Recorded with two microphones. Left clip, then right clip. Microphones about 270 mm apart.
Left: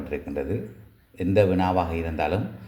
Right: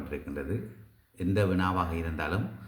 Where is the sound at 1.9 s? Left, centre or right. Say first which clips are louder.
Left 7 dB; centre.